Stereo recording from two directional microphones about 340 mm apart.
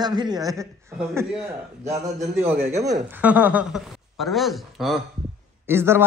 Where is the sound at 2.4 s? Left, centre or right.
Centre.